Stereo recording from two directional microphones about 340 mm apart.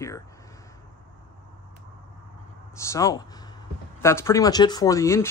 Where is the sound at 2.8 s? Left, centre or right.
Centre.